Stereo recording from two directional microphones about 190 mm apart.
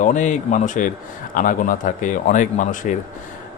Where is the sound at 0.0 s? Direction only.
40° left (ahead or behind).